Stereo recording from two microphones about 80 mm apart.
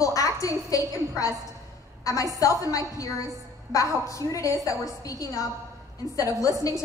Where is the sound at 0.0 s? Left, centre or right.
Left.